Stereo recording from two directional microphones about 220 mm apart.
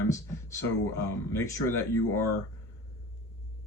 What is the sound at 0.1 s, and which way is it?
Speech, 10° left (ahead or behind).